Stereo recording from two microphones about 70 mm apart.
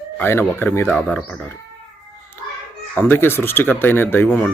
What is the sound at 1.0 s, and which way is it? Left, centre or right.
Speech, centre.